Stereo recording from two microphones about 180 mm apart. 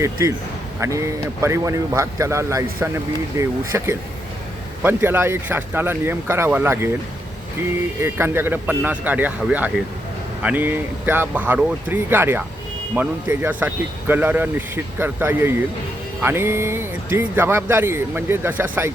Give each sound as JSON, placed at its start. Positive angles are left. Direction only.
{"t": 0.0, "sound": "speech", "side_deg": -15}
{"t": 7.9, "sound": "speech", "side_deg": -15}